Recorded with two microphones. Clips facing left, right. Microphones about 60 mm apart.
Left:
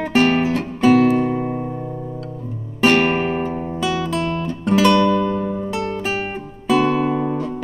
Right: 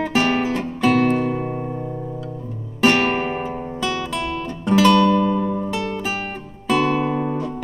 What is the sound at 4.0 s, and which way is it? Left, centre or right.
Guitar, centre.